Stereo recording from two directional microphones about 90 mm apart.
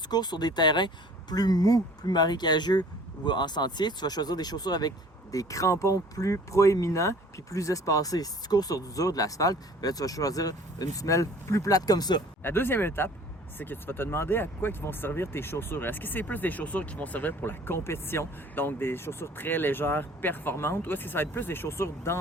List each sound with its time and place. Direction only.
0.1 s speech: 50° left (ahead or behind)
12.4 s speech: 25° left (ahead or behind)